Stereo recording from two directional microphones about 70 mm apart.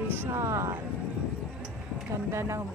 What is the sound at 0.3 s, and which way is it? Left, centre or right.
Speech, right.